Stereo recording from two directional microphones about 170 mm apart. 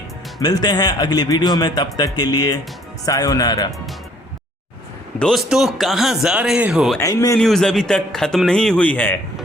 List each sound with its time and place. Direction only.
0.3 s a man's voice: 25° left (ahead or behind)
5.2 s speech: centre (ahead or behind)
7.0 s a man's voice: 20° left (ahead or behind)
7.3 s speech: 5° left (ahead or behind)